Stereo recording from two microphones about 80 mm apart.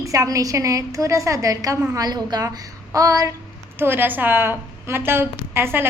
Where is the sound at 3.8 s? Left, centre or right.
Right.